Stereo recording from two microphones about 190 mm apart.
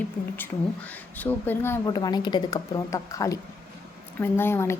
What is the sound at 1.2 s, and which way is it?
Speech, 10° left (ahead or behind).